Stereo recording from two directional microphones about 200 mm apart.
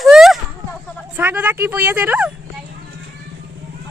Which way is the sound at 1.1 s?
10° right (ahead or behind).